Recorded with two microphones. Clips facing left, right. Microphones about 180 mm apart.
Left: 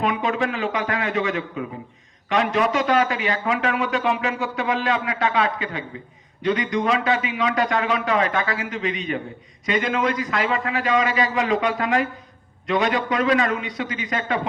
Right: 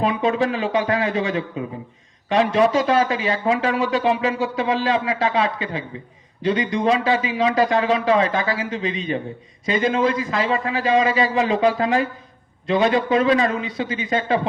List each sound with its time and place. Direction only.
0.0 s a man's voice: 30° right (ahead or behind)